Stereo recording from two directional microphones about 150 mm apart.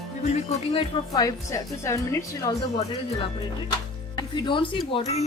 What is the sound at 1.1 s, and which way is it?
A woman's voice, 20° left (ahead or behind).